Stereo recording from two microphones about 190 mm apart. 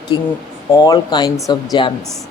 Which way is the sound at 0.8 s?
20° left (ahead or behind).